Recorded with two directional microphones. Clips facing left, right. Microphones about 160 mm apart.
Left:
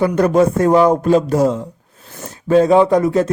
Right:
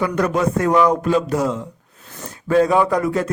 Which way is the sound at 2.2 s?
25° left (ahead or behind).